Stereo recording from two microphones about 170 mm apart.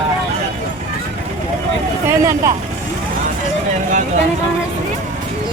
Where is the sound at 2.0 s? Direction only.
15° right (ahead or behind).